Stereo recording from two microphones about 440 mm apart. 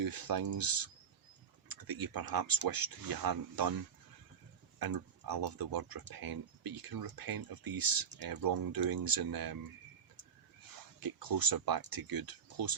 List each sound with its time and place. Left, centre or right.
0.0 s speech: right
4.8 s speech: right
11.0 s speech: right